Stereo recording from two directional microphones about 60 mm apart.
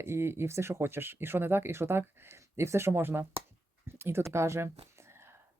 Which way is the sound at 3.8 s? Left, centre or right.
Right.